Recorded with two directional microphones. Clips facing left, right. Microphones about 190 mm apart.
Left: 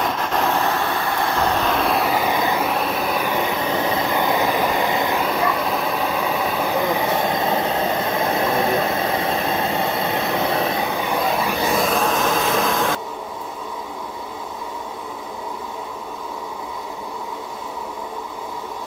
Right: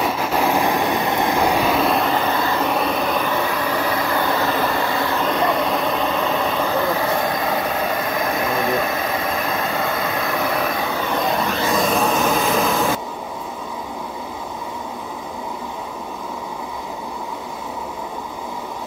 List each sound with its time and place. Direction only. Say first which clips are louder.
0.0 s vehicle: right 2 dB; 5° right (ahead or behind); by 2.7 s 15° left (ahead or behind)
2.7 s vehicle: right 2 dB; centre (ahead or behind); by 10.9 s 25° left (ahead or behind)
11.0 s vehicle: even; 10° left (ahead or behind)
11.8 s a sound: right 1 dB; centre (ahead or behind)